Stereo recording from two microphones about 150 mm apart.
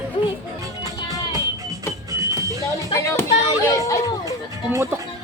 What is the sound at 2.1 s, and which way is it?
Music, 20° right (ahead or behind).